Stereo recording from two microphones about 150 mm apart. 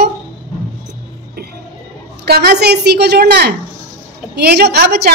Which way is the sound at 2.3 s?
90° right.